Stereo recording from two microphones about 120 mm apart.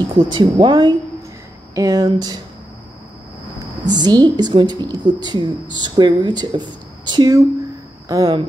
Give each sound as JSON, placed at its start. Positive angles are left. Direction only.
{"t": 0.2, "sound": "speech", "side_deg": -40}
{"t": 3.9, "sound": "speech", "side_deg": -35}